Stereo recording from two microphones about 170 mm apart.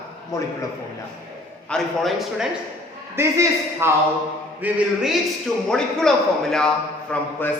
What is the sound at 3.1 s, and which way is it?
A man's voice, 15° right (ahead or behind).